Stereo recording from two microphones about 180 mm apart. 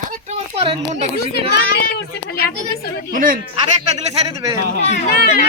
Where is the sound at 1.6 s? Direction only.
60° left (ahead or behind).